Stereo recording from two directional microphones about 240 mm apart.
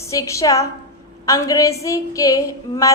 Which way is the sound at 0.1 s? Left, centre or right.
Centre.